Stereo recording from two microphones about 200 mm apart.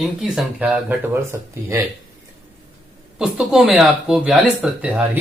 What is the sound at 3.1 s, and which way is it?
Speech, 5° right (ahead or behind).